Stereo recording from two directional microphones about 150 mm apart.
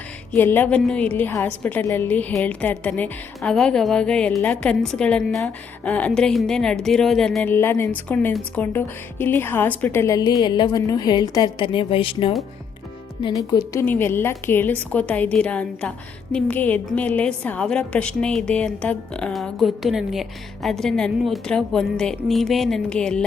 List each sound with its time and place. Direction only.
0.3 s a woman's voice: 15° left (ahead or behind)
7.5 s speech: 15° left (ahead or behind); by 12.3 s 35° left (ahead or behind)
13.2 s speech: 25° left (ahead or behind)
13.8 s a woman's voice: 15° left (ahead or behind)